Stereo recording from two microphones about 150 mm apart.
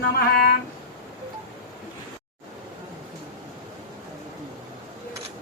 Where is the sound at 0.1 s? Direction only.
90° left.